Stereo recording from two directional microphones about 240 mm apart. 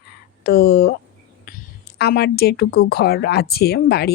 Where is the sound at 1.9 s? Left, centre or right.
Left.